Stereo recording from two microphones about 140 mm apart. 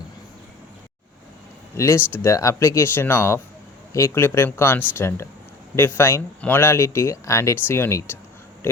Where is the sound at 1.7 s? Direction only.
20° left (ahead or behind).